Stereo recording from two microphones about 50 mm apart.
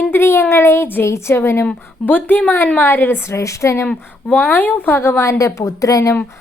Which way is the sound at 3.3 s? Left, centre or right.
Left.